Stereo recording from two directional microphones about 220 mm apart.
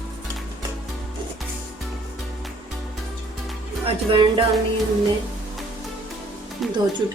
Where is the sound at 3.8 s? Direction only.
25° right (ahead or behind).